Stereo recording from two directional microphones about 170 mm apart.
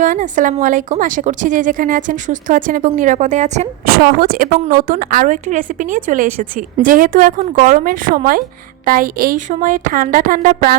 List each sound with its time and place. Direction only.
0.0 s speech: 50° right (ahead or behind)
3.8 s a woman's voice: 60° right (ahead or behind)